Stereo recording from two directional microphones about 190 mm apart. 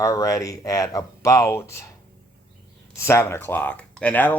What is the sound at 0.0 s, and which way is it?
Speech, 15° left (ahead or behind).